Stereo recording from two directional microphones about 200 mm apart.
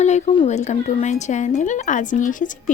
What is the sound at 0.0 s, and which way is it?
Speech, 35° left (ahead or behind).